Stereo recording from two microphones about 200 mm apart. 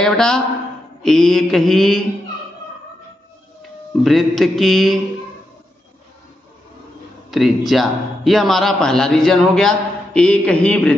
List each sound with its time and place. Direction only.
0.0 s speech: 5° left (ahead or behind)
4.0 s speech: centre (ahead or behind)
7.2 s speech: centre (ahead or behind)